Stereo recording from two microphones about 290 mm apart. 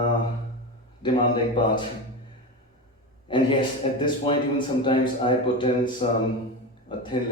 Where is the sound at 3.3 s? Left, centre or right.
Centre.